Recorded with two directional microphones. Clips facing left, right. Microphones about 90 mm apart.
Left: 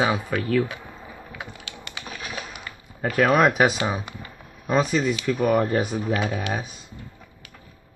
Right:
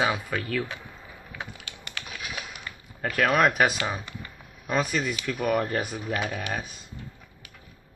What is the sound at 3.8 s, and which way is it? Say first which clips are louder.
Speech: left 4 dB; 10° left (ahead or behind).